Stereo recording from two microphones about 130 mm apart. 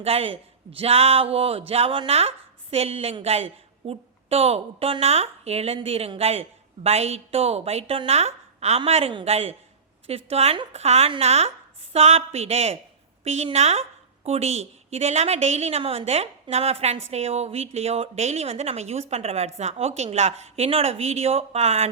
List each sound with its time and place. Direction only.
0.0 s a woman's voice: 50° right (ahead or behind)